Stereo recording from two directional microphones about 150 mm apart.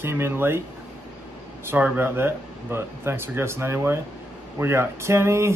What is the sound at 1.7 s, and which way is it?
Speech, 15° right (ahead or behind).